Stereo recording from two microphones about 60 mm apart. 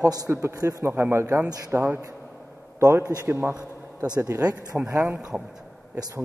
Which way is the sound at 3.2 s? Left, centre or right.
Right.